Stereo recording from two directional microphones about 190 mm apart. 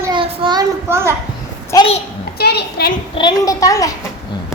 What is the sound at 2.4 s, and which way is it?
Speech, 60° left (ahead or behind).